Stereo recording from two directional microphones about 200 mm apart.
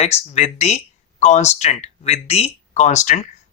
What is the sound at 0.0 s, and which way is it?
Speech, 30° left (ahead or behind).